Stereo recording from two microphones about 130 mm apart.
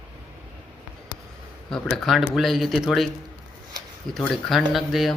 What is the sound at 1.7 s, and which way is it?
Speech, 5° left (ahead or behind).